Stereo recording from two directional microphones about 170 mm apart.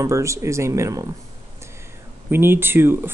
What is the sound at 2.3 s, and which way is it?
Speech, 15° right (ahead or behind).